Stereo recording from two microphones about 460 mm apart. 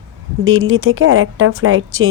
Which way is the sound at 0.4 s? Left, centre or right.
Right.